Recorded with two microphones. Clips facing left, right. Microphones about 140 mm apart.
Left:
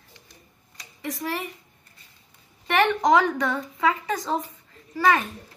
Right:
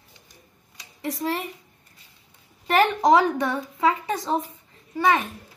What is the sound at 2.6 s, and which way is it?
A woman's voice, 30° right (ahead or behind).